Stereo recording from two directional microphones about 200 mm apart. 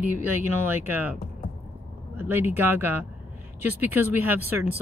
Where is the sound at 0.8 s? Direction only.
10° right (ahead or behind).